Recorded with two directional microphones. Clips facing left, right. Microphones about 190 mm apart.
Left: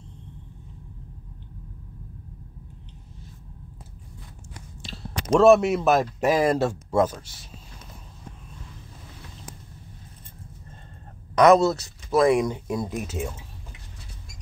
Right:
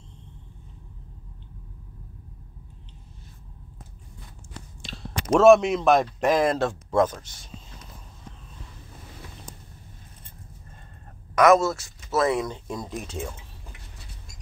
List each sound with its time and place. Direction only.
5.3 s a man's voice: centre (ahead or behind)
11.3 s speech: 35° left (ahead or behind)
11.6 s a man's voice: 20° left (ahead or behind)